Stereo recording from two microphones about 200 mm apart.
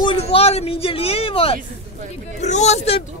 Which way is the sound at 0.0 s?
25° left (ahead or behind).